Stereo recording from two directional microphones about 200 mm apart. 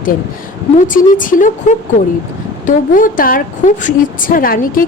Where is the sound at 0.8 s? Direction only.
40° left (ahead or behind).